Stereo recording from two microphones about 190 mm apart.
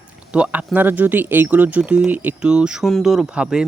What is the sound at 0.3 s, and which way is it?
Speech, 5° right (ahead or behind).